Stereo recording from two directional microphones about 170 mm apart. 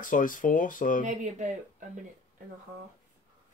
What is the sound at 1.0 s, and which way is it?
Speech, 45° right (ahead or behind).